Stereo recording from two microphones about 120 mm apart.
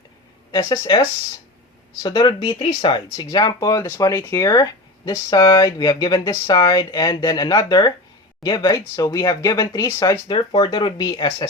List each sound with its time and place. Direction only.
0.5 s speech: 40° left (ahead or behind)
2.0 s speech: 40° left (ahead or behind); by 4.4 s 20° left (ahead or behind)
4.4 s speech: 30° left (ahead or behind)